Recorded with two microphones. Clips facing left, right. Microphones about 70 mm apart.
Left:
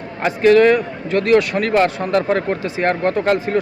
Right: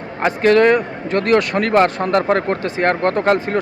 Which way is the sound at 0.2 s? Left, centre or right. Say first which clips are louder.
Left 1 dB; right.